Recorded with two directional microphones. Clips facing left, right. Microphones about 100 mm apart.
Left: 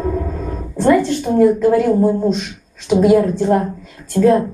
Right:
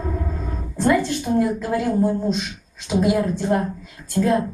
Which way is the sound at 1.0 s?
45° left (ahead or behind).